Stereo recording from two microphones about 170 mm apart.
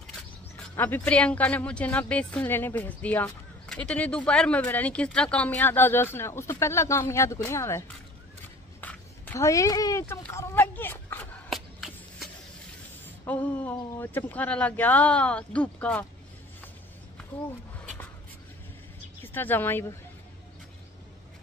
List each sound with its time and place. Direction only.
0.7 s speech: 10° left (ahead or behind)
8.8 s speech: 15° left (ahead or behind)
10.3 s a sound: 15° left (ahead or behind)
11.5 s a sound: centre (ahead or behind)
13.0 s speech: 10° left (ahead or behind)
19.2 s speech: 10° left (ahead or behind)